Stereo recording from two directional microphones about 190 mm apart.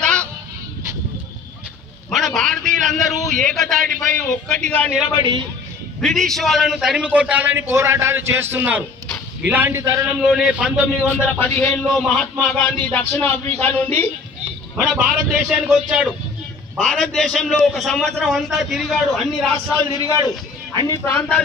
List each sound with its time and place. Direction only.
0.0 s honk: 5° left (ahead or behind)
2.0 s a man's voice: centre (ahead or behind)
5.1 s a man's voice: 20° right (ahead or behind)
5.9 s a man's voice: centre (ahead or behind); by 10.0 s 15° right (ahead or behind)
10.2 s a man's voice: 5° right (ahead or behind)
11.1 s a man's voice: 10° left (ahead or behind)
11.9 s a man's voice: centre (ahead or behind)
12.9 s a man's voice: 10° left (ahead or behind)
14.8 s a man's voice: 5° right (ahead or behind)
19.7 s a man's voice: 20° left (ahead or behind)